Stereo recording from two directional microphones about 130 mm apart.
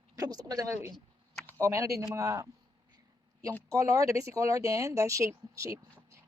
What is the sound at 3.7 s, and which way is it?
Speech, 25° right (ahead or behind).